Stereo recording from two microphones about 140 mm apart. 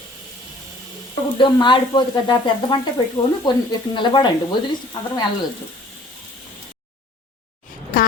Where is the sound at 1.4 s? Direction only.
35° left (ahead or behind).